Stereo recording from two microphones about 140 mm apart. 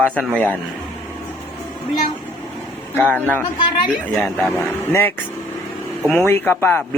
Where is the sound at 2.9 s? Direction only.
15° left (ahead or behind).